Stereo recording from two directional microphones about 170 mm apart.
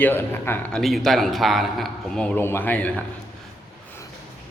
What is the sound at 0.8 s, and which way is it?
A man's voice, centre (ahead or behind).